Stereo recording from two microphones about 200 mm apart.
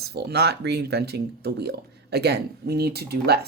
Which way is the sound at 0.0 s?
55° right (ahead or behind).